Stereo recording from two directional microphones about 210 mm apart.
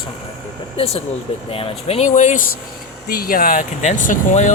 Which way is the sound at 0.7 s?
30° left (ahead or behind).